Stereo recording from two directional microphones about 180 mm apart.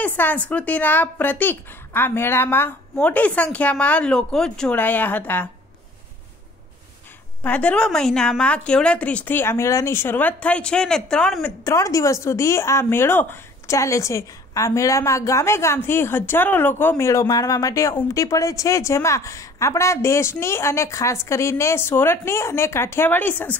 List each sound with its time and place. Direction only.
0.0 s speech: 10° left (ahead or behind)
7.4 s speech: 5° left (ahead or behind)
11.6 s speech: 20° left (ahead or behind)